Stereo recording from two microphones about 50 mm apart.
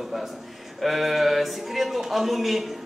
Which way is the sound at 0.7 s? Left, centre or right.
Centre.